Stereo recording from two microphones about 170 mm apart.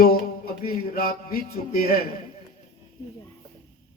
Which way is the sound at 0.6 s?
60° left (ahead or behind).